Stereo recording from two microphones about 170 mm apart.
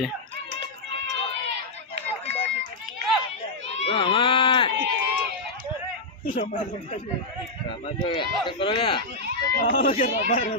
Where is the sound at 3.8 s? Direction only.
30° left (ahead or behind).